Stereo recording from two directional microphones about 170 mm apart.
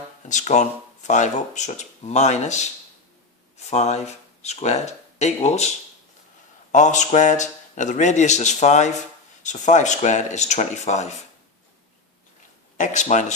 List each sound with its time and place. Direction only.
0.3 s speech: 45° left (ahead or behind)
3.7 s speech: 40° left (ahead or behind)
12.7 s speech: 45° left (ahead or behind)